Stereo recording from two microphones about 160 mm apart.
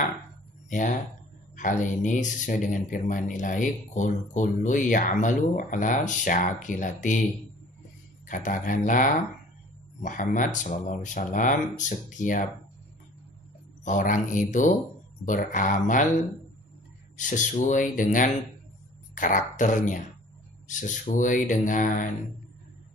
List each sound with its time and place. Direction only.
0.7 s speech: 50° left (ahead or behind)
8.3 s speech: 55° left (ahead or behind)
13.8 s speech: 55° left (ahead or behind)
17.2 s speech: 50° left (ahead or behind)